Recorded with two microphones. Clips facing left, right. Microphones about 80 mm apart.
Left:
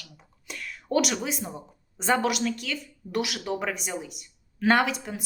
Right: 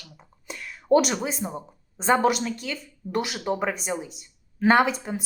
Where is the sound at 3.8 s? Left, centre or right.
Centre.